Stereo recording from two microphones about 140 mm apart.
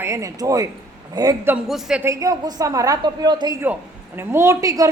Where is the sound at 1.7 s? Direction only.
5° right (ahead or behind).